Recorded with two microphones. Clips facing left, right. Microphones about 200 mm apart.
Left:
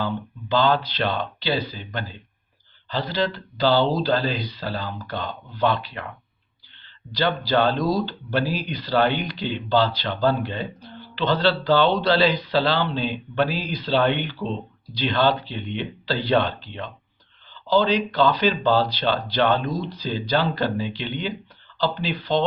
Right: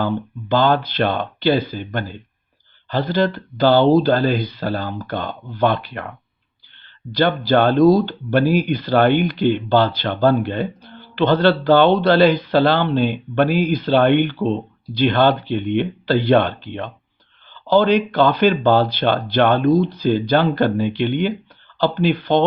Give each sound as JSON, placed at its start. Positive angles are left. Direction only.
{"t": 0.0, "sound": "speech", "side_deg": -50}